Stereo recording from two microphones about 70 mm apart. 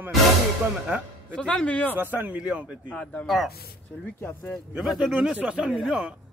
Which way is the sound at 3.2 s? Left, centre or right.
Centre.